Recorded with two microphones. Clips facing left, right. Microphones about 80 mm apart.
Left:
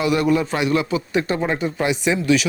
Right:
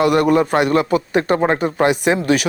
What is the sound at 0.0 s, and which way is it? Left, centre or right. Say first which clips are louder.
A man's voice: right 4 dB; right.